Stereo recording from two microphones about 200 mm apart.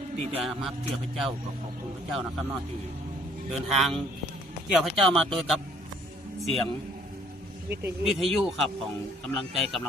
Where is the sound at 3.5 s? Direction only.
Centre (ahead or behind).